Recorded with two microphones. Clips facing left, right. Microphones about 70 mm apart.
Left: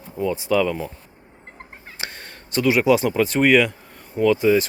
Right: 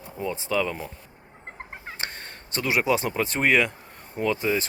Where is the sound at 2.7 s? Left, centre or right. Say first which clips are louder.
Left 6 dB; centre.